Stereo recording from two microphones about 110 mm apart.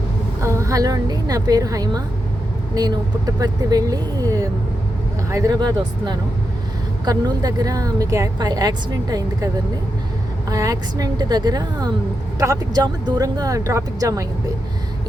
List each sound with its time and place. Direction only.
0.4 s a woman's voice: 25° right (ahead or behind)
5.5 s a woman's voice: 40° right (ahead or behind)
10.5 s a woman's voice: 35° right (ahead or behind)